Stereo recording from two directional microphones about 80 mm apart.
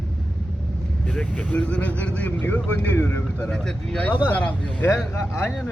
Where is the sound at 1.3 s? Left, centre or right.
Left.